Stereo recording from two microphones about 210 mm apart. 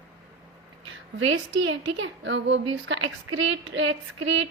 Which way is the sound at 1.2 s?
65° right (ahead or behind).